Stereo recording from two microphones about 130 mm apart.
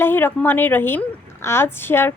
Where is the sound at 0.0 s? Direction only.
15° left (ahead or behind).